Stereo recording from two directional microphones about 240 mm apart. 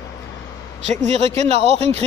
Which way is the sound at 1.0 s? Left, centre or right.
Right.